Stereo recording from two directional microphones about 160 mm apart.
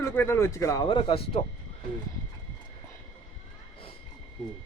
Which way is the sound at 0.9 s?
35° left (ahead or behind).